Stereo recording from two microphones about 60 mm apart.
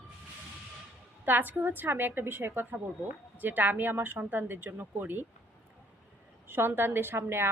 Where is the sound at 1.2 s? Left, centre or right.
Right.